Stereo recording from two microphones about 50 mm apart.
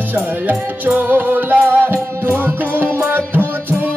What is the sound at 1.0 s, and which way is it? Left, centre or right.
Music, right.